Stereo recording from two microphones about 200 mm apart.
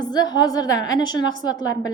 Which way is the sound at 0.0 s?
20° left (ahead or behind).